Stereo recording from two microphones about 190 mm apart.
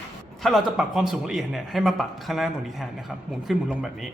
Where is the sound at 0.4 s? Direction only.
Centre (ahead or behind).